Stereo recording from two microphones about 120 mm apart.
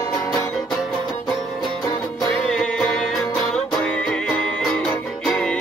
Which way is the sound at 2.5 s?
5° left (ahead or behind).